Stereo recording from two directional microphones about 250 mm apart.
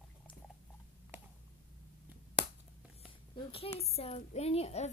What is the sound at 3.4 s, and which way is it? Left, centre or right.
A woman's voice, centre.